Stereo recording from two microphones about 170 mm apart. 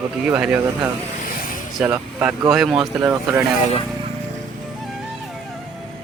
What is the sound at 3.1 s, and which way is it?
Speech, 15° right (ahead or behind).